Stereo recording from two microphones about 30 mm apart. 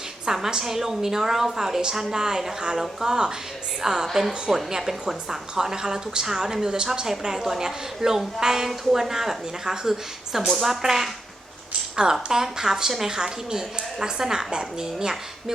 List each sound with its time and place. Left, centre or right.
0.3 s a woman's voice: centre
4.0 s a woman's voice: centre
4.3 s a woman's voice: centre
12.1 s speech: centre
13.1 s a woman's voice: right